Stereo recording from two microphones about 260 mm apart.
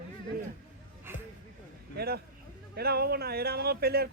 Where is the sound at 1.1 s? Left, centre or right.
Centre.